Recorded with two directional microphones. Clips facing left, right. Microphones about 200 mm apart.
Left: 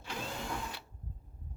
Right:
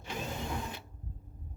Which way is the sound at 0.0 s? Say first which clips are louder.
Right 2 dB; 20° right (ahead or behind).